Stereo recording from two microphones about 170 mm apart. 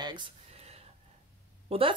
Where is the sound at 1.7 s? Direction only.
30° right (ahead or behind).